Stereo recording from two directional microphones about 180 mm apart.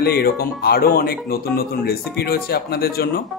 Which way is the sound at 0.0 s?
60° left (ahead or behind).